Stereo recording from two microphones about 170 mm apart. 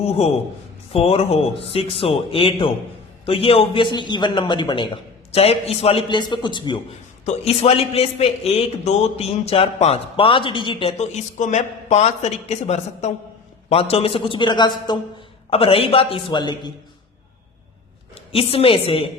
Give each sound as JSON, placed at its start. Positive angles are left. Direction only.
{"t": 0.9, "sound": "a man's voice", "side_deg": 35}
{"t": 18.1, "sound": "a woman's voice", "side_deg": 35}